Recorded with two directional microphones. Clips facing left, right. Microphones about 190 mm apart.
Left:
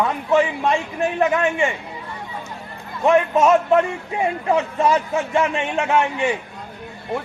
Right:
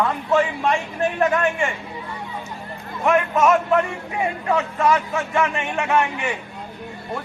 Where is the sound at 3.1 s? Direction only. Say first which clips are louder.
Left 2 dB; 25° left (ahead or behind).